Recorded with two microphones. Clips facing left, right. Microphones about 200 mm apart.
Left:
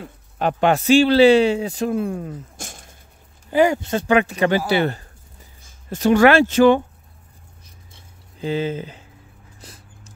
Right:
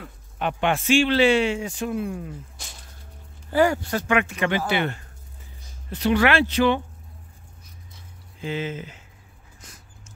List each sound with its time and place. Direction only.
0.0 s a man's voice: 35° left (ahead or behind)
3.4 s speech: 20° left (ahead or behind)
4.1 s a man's voice: 35° left (ahead or behind)
7.9 s squish: 35° left (ahead or behind)
9.6 s dog: 35° left (ahead or behind)